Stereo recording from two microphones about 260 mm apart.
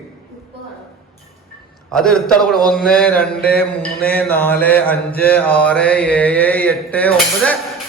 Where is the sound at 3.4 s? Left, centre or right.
Left.